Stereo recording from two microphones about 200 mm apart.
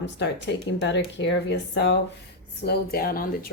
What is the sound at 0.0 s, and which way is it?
Speech, 60° left (ahead or behind).